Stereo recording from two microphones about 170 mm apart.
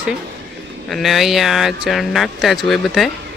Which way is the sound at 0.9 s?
Centre (ahead or behind).